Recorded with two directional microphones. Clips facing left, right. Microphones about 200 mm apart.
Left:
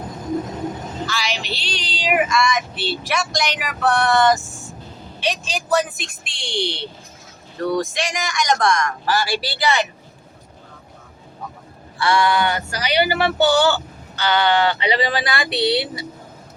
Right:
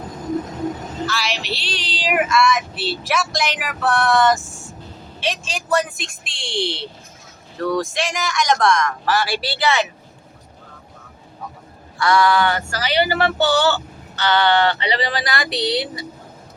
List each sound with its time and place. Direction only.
1.0 s female singing: centre (ahead or behind)
11.9 s speech: 25° left (ahead or behind)
15.1 s female singing: 25° left (ahead or behind)